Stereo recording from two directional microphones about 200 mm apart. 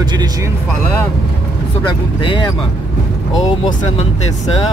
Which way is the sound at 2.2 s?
25° left (ahead or behind).